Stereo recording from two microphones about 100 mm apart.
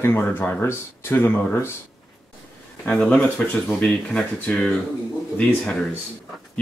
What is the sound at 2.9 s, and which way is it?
Speech, 10° left (ahead or behind).